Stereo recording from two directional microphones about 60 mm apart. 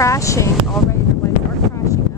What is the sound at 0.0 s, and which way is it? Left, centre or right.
Speech, left.